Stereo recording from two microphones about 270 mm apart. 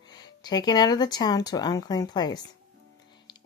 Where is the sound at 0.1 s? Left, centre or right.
Centre.